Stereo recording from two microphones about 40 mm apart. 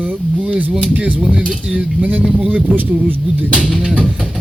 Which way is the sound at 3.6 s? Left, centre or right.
Right.